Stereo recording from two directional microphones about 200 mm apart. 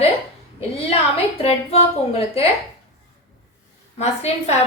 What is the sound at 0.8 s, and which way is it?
A woman's voice, 30° left (ahead or behind).